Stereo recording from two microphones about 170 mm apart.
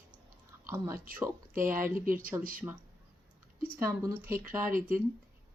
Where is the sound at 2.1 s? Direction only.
55° right (ahead or behind).